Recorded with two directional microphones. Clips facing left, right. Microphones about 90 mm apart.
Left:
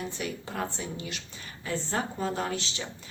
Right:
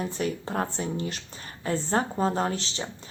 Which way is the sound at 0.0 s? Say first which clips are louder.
Right 5 dB; 40° right (ahead or behind).